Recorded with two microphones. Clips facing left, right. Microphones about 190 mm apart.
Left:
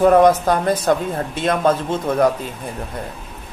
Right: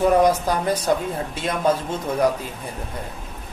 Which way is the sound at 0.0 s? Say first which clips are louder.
Left 5 dB; 60° left (ahead or behind).